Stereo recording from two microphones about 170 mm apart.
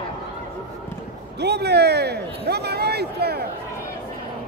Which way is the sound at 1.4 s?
75° right (ahead or behind).